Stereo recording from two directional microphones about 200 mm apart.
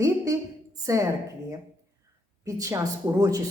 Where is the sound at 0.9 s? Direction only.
15° right (ahead or behind).